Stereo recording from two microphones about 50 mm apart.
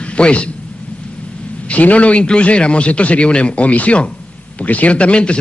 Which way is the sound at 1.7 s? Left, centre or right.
Left.